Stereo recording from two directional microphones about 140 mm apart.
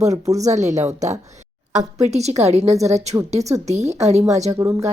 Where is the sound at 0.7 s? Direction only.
55° right (ahead or behind).